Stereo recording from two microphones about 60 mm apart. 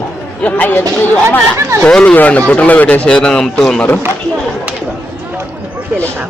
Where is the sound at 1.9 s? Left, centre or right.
Centre.